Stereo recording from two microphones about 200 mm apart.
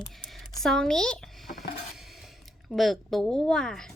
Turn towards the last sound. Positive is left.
turn(degrees=5)  # may be behind; listen again after turning